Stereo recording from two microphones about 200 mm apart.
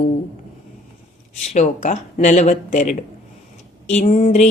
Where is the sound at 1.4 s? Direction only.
35° left (ahead or behind).